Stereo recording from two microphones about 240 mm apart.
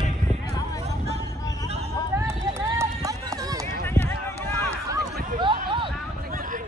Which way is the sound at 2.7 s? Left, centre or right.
Centre.